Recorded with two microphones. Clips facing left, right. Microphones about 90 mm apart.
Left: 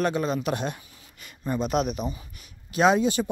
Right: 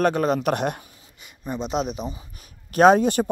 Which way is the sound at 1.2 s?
15° right (ahead or behind).